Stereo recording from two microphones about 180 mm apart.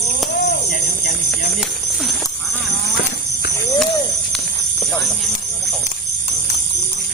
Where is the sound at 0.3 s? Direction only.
60° left (ahead or behind).